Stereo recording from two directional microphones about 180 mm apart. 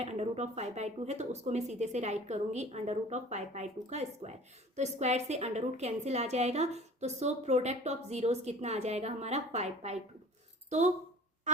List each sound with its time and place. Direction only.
0.0 s a woman's voice: 35° right (ahead or behind)